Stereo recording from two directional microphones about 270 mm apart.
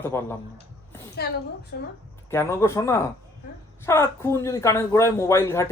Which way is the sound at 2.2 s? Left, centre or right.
Centre.